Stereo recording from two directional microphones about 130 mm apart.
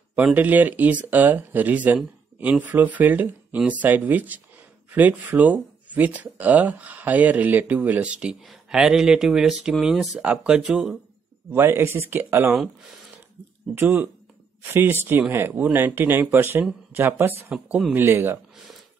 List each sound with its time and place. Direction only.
0.1 s speech: 10° right (ahead or behind)
11.5 s speech: 20° right (ahead or behind)
13.7 s speech: 15° right (ahead or behind)